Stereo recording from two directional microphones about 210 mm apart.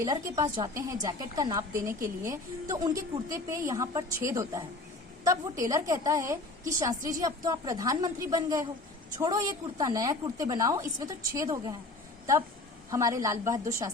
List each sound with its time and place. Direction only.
0.0 s a woman's voice: 15° right (ahead or behind)
12.9 s a woman's voice: 15° right (ahead or behind)